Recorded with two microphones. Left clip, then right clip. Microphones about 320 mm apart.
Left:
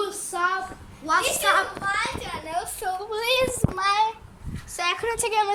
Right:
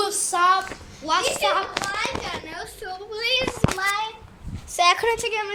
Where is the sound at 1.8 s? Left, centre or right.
Right.